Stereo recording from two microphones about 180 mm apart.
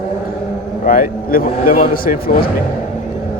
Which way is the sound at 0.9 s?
50° left (ahead or behind).